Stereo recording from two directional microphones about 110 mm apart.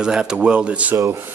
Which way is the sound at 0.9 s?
30° right (ahead or behind).